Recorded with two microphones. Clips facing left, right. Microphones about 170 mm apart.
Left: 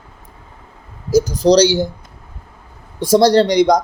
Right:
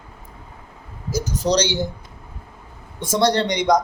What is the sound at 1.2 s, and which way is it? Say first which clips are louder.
Speech: left 6 dB; 35° left (ahead or behind).